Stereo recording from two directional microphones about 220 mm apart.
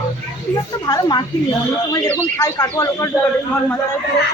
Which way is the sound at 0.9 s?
20° left (ahead or behind).